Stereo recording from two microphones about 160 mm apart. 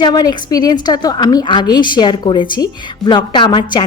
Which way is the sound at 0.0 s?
25° left (ahead or behind).